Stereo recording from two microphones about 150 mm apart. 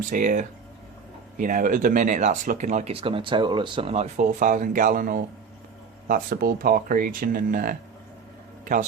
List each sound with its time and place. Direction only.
0.1 s speech: 60° right (ahead or behind)
6.1 s speech: 80° right